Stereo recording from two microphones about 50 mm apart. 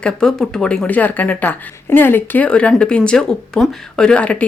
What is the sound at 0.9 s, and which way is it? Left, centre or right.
Speech, left.